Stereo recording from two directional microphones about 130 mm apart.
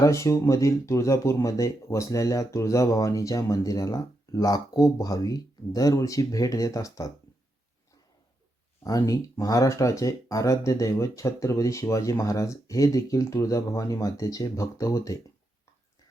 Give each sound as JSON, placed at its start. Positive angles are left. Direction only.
{"t": 0.0, "sound": "speech", "side_deg": 25}
{"t": 8.8, "sound": "speech", "side_deg": 25}